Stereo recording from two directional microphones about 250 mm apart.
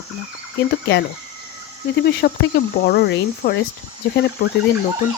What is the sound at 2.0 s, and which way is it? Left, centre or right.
Speech, left.